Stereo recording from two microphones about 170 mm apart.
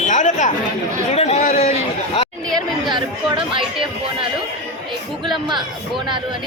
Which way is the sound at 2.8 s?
30° right (ahead or behind).